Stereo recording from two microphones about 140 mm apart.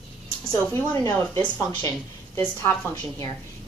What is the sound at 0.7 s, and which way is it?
A woman's voice, 15° left (ahead or behind).